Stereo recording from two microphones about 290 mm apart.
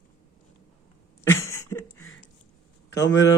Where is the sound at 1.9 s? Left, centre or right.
Left.